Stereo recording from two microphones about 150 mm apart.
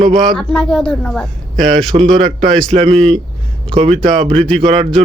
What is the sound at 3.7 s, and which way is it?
Speech, 40° right (ahead or behind).